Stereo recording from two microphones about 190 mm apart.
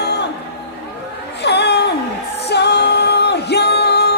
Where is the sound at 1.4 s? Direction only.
60° left (ahead or behind).